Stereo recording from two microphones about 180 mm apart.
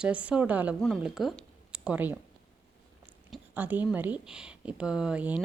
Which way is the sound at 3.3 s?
10° right (ahead or behind).